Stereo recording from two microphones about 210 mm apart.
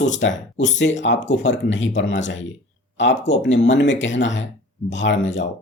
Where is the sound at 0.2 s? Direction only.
55° left (ahead or behind).